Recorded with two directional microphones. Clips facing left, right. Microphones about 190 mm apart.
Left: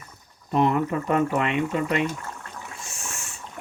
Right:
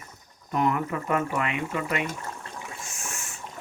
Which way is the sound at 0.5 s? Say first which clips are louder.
Left 4 dB; 30° left (ahead or behind).